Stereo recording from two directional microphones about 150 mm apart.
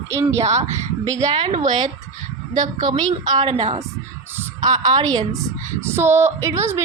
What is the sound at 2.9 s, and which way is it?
Speech, 30° right (ahead or behind).